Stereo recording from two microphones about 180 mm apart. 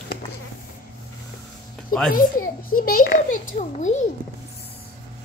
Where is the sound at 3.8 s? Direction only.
40° left (ahead or behind).